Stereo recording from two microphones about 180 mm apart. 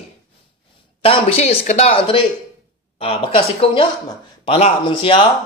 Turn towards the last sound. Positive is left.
turn(degrees=30)  # may be behind; listen again after turning